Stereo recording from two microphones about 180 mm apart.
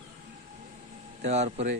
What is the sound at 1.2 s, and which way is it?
Speech, 40° right (ahead or behind).